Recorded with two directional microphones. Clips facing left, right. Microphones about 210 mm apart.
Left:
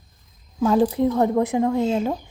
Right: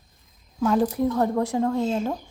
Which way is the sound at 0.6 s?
25° left (ahead or behind).